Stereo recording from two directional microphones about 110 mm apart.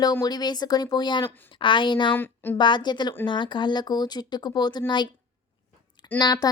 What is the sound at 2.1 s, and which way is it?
Speech, 20° left (ahead or behind).